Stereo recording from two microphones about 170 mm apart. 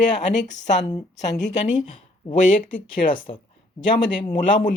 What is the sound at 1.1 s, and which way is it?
Speech, 90° left.